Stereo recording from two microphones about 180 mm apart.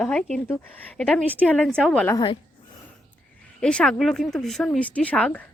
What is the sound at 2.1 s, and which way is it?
Speech, 25° left (ahead or behind).